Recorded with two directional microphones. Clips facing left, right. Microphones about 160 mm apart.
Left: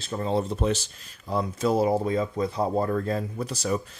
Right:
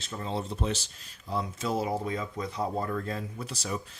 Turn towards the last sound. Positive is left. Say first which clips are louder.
# left 7 dB
turn(degrees=45)  # may be behind; listen again after turning